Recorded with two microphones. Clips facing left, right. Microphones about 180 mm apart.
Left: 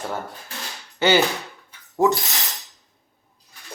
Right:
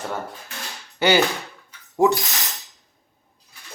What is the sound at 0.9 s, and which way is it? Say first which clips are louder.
Speech: even; 15° right (ahead or behind).